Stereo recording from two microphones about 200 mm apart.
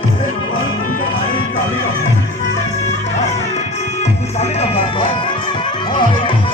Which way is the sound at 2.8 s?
35° left (ahead or behind).